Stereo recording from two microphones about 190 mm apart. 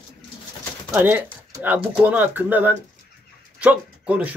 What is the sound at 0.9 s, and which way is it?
Speech, 10° right (ahead or behind).